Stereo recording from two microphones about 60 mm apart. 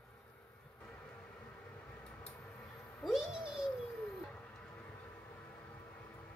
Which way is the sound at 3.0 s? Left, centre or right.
Centre.